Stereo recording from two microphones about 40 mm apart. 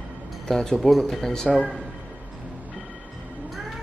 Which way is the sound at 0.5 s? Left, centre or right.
Centre.